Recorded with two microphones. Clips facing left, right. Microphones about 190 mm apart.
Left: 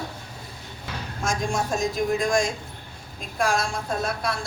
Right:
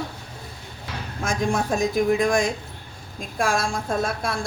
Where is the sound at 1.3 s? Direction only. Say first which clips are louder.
Right 3 dB; 60° right (ahead or behind).